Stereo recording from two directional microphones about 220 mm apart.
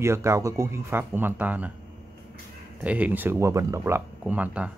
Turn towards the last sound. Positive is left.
turn(degrees=-5)  # may be behind; listen again after turning